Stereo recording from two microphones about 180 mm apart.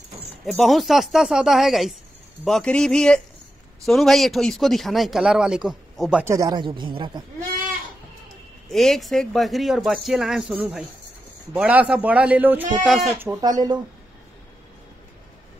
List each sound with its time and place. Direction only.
0.5 s speech: centre (ahead or behind)
6.3 s speech: 20° right (ahead or behind)
8.6 s a man's voice: centre (ahead or behind)
13.2 s speech: 20° right (ahead or behind)